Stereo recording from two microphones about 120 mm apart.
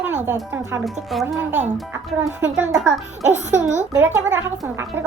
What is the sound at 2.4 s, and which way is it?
Speech, 10° right (ahead or behind).